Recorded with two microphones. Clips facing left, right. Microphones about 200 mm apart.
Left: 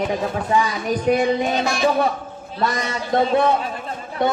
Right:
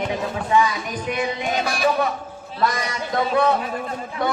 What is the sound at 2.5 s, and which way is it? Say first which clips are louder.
Speech: even; 25° left (ahead or behind).